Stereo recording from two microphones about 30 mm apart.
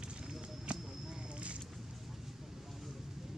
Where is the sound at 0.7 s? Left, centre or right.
Right.